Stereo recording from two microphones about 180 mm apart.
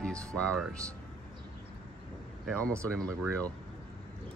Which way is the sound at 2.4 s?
5° left (ahead or behind).